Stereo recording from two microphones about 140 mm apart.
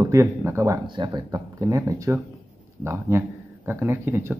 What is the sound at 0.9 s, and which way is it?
Speech, 30° right (ahead or behind).